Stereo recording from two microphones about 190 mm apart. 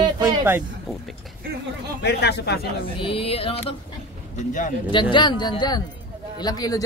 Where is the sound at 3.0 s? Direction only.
30° left (ahead or behind).